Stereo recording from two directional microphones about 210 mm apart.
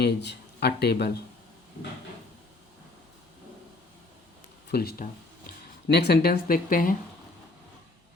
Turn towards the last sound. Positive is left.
turn(degrees=40)  # may be behind; listen again after turning